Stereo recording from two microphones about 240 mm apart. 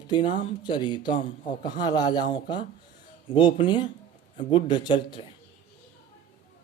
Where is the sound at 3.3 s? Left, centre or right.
Centre.